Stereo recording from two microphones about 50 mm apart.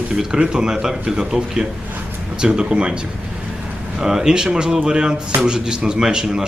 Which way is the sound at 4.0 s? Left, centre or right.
Centre.